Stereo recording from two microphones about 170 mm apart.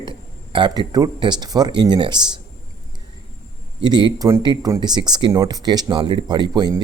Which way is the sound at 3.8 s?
25° right (ahead or behind).